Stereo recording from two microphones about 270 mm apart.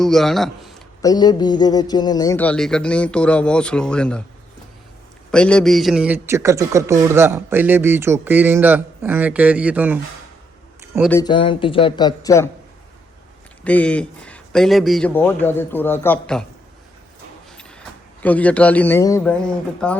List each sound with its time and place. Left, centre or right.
0.0 s a man's voice: centre
1.0 s speech: centre
5.3 s speech: centre
10.8 s a sound: centre
11.1 s speech: centre
13.7 s speech: centre
17.6 s speech: centre